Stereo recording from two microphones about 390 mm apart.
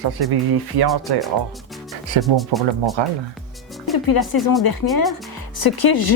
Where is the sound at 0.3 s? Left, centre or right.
Right.